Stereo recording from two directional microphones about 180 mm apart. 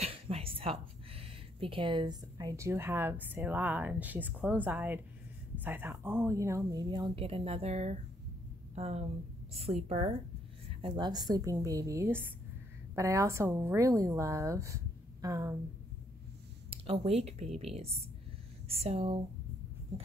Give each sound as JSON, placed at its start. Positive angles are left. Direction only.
{"t": 0.0, "sound": "speech", "side_deg": -35}
{"t": 16.7, "sound": "speech", "side_deg": -30}